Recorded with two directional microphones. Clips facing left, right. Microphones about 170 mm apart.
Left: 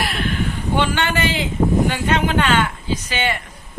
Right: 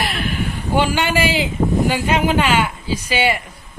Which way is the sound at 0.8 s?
10° right (ahead or behind).